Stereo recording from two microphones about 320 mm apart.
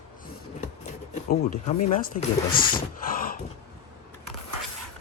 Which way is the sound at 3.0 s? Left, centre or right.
Left.